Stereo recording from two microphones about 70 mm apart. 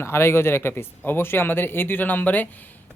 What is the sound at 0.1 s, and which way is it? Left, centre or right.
Speech, left.